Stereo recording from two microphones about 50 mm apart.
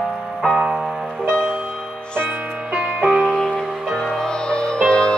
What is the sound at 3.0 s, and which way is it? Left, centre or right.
Music, centre.